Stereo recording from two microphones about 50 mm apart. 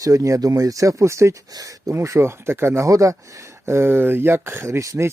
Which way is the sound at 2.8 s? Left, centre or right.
Right.